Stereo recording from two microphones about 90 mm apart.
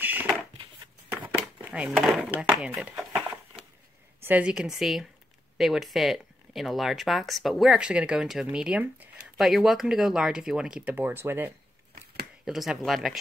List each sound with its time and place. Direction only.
0.0 s a sound: 20° right (ahead or behind)
1.3 s a sound: 15° right (ahead or behind)
2.5 s speech: 10° right (ahead or behind)
4.2 s speech: 15° right (ahead or behind)
11.0 s speech: 25° right (ahead or behind)
12.4 s speech: 5° right (ahead or behind)